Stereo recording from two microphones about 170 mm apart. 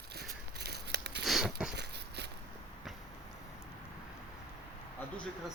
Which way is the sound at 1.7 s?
85° right.